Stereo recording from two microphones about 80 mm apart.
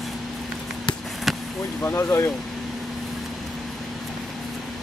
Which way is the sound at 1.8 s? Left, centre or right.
Left.